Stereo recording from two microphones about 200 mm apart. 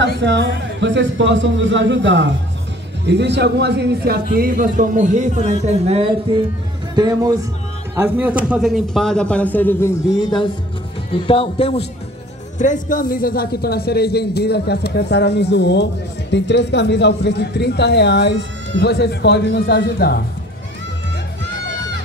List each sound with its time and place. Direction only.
0.2 s a man's voice: 65° right (ahead or behind); by 6.0 s 30° right (ahead or behind)
7.0 s a man's voice: 20° right (ahead or behind); by 11.9 s 30° left (ahead or behind)
12.5 s a man's voice: 40° left (ahead or behind)